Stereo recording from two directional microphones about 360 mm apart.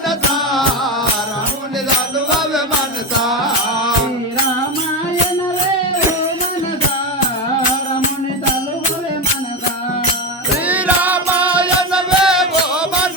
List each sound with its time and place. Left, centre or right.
3.2 s music: centre
10.7 s music: centre